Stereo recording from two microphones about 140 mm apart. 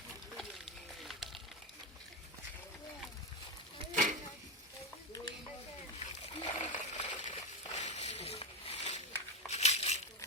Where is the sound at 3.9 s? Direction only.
65° right (ahead or behind).